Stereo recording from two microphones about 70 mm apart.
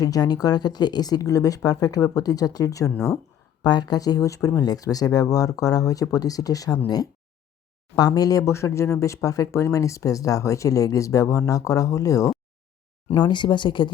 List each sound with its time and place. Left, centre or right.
0.0 s speech: left
3.6 s speech: left
4.4 s speech: left
8.4 s speech: left
13.1 s speech: left